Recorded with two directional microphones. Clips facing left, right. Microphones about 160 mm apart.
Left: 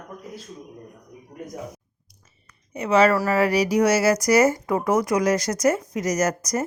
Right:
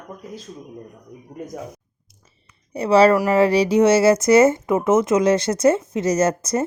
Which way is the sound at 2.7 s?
35° right (ahead or behind).